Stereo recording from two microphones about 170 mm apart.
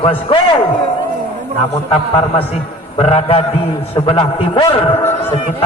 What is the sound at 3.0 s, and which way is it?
A man's voice, 35° left (ahead or behind).